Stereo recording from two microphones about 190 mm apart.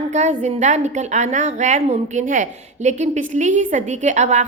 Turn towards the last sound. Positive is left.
turn(degrees=-40)  # may be behind; listen again after turning